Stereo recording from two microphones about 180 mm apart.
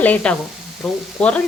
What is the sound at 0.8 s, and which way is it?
Frying, centre (ahead or behind).